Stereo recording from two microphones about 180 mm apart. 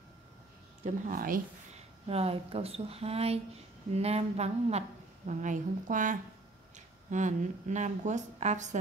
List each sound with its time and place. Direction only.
0.8 s speech: 45° right (ahead or behind)
2.0 s a woman's voice: 35° right (ahead or behind)